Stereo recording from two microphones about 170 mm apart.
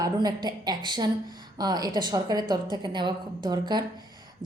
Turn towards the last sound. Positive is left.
turn(degrees=-25)  # may be behind; listen again after turning